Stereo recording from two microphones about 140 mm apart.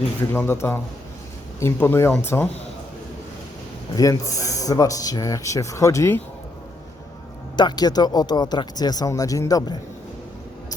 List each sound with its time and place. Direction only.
0.3 s speech: 15° left (ahead or behind)
3.9 s speech: 25° left (ahead or behind)
7.5 s speech: 30° left (ahead or behind)